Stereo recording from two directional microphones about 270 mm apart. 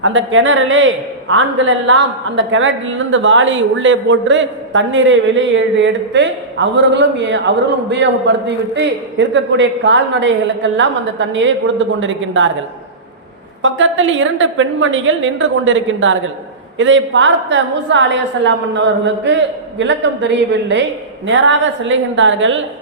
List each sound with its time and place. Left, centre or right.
0.0 s a man's voice: right
13.6 s a man's voice: right